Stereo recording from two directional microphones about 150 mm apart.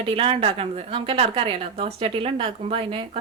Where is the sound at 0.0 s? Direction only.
35° right (ahead or behind).